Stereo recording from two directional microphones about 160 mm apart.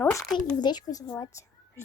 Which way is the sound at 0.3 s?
25° left (ahead or behind).